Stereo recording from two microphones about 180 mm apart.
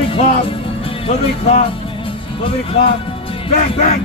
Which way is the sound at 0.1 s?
30° left (ahead or behind).